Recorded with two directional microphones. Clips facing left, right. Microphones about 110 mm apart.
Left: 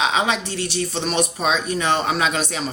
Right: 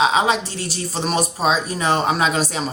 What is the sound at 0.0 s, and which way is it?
Speech, 35° right (ahead or behind).